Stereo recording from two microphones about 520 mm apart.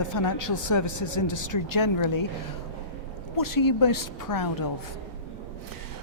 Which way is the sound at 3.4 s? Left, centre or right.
Left.